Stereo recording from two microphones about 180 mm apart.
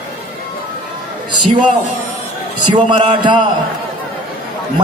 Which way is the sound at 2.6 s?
25° right (ahead or behind).